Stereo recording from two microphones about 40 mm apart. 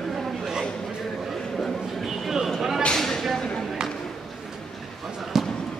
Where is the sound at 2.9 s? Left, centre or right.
Centre.